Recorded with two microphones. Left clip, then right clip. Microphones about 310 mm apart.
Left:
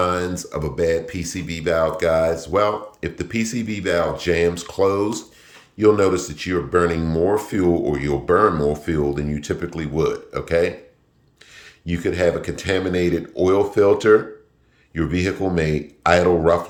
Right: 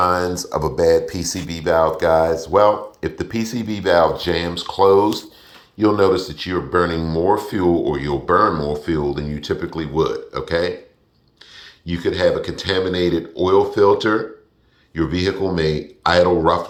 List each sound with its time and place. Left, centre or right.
0.0 s speech: centre
5.9 s speech: centre